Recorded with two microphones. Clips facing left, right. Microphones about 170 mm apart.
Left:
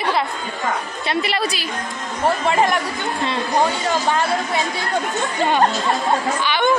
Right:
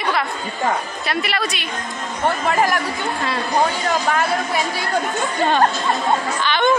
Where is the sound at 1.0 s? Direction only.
30° left (ahead or behind).